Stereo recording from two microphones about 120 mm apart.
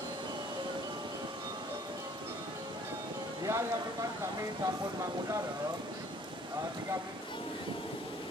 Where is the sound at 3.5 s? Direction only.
25° right (ahead or behind).